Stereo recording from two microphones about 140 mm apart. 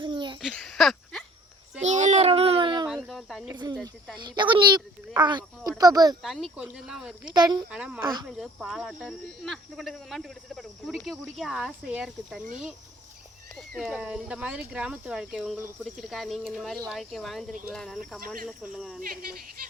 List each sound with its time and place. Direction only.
0.0 s a sound: 35° right (ahead or behind)
0.4 s a sound: 5° left (ahead or behind)
1.8 s child singing: 55° right (ahead or behind); by 2.8 s 35° right (ahead or behind)
2.9 s cricket: centre (ahead or behind)
3.5 s speech: 30° right (ahead or behind)
3.8 s speech: 5° left (ahead or behind)
4.2 s speech: 35° right (ahead or behind)
6.2 s speech: centre (ahead or behind)
7.3 s speech: 30° right (ahead or behind)
7.7 s speech: 5° right (ahead or behind)
8.0 s speech: 25° right (ahead or behind)
8.3 s speech: centre (ahead or behind)
13.6 s speech: centre (ahead or behind)